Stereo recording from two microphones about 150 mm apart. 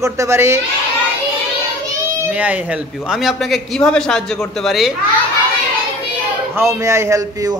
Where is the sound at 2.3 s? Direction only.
10° right (ahead or behind).